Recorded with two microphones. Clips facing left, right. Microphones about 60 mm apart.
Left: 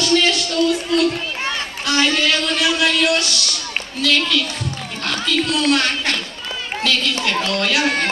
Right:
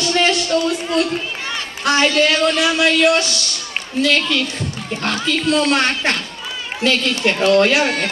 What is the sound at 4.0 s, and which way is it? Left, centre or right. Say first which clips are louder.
Speech: right 2 dB; right.